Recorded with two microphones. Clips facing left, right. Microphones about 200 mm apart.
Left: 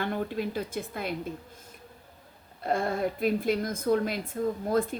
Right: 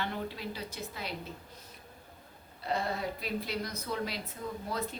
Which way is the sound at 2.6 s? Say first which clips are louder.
Left 6 dB; 50° left (ahead or behind).